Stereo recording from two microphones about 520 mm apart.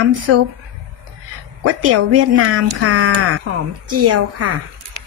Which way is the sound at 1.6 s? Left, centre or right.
Right.